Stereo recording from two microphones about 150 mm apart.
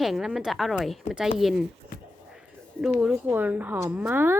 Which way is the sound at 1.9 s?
70° left (ahead or behind).